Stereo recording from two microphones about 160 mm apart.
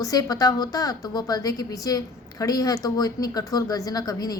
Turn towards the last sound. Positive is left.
turn(degrees=25)  # may be behind; listen again after turning